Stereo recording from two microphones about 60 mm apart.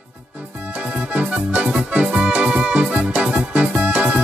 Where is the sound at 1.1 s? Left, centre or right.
Right.